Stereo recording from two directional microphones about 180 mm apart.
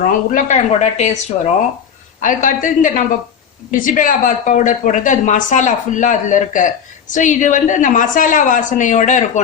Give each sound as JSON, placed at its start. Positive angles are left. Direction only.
{"t": 0.0, "sound": "speech", "side_deg": 45}
{"t": 2.2, "sound": "a woman's voice", "side_deg": 45}